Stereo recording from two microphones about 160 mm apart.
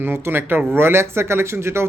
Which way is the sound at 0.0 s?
15° right (ahead or behind).